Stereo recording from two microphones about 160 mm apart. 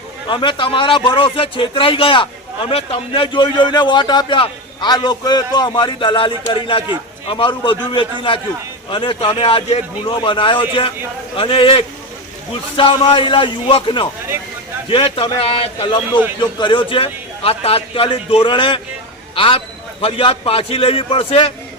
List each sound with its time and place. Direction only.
0.3 s a man's voice: 30° left (ahead or behind)